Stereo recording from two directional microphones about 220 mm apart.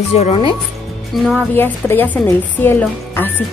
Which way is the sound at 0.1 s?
25° left (ahead or behind).